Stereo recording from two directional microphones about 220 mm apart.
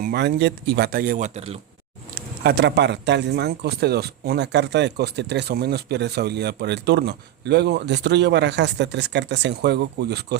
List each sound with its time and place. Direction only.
0.0 s speech: 50° right (ahead or behind); by 1.5 s 30° right (ahead or behind)
2.1 s speech: 45° right (ahead or behind)